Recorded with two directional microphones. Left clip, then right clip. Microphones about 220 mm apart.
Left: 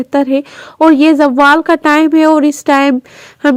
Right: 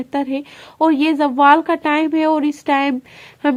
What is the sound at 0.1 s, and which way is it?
Speech, 25° left (ahead or behind).